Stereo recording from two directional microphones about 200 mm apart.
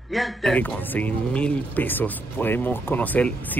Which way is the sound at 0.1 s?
Centre (ahead or behind).